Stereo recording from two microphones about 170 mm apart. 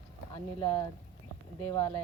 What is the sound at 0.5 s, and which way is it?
Speech, 20° left (ahead or behind).